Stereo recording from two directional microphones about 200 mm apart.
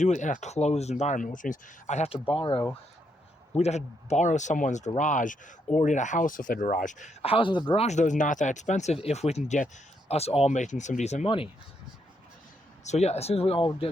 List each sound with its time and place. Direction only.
0.0 s speech: 35° left (ahead or behind)
12.8 s speech: 35° left (ahead or behind)